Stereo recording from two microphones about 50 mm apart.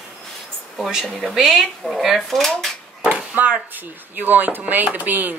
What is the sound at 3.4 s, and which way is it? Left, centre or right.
A woman's voice, right.